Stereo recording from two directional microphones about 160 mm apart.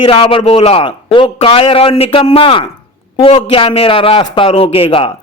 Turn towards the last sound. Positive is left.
turn(degrees=35)  # may be behind; listen again after turning